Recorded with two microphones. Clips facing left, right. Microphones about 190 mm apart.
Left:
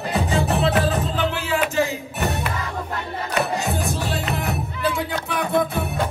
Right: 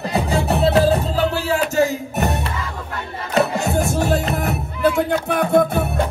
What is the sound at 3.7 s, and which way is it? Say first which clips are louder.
Music: right 7 dB; 50° right (ahead or behind).